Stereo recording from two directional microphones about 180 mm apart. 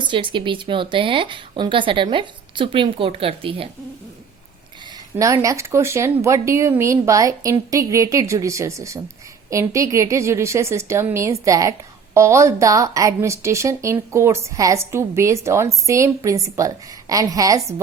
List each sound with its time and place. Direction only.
0.0 s a woman's voice: 25° right (ahead or behind)
5.1 s a woman's voice: 15° right (ahead or behind)